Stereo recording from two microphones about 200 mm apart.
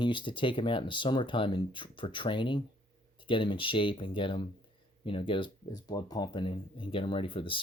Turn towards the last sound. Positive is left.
turn(degrees=25)  # may be behind; listen again after turning